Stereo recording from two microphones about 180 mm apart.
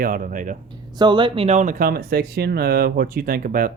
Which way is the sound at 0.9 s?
25° right (ahead or behind).